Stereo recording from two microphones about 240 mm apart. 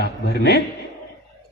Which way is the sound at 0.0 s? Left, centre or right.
Left.